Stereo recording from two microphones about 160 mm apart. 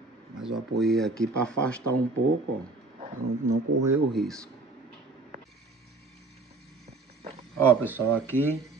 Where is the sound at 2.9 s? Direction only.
45° right (ahead or behind).